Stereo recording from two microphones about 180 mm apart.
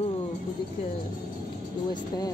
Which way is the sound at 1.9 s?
20° left (ahead or behind).